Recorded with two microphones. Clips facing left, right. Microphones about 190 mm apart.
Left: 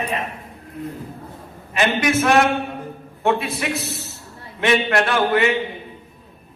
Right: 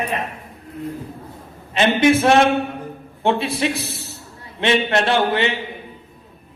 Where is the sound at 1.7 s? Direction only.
30° right (ahead or behind).